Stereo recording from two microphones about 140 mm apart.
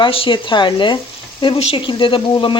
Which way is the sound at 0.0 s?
40° left (ahead or behind).